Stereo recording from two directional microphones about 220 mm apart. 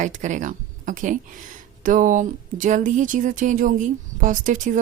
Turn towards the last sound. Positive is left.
turn(degrees=-35)  # may be behind; listen again after turning